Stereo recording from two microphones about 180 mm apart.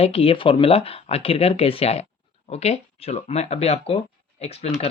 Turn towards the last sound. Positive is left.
turn(degrees=35)  # may be behind; listen again after turning